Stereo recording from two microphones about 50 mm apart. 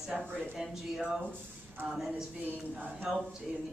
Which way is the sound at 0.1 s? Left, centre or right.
Centre.